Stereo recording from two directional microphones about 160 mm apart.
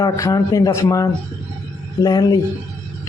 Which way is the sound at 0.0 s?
25° left (ahead or behind).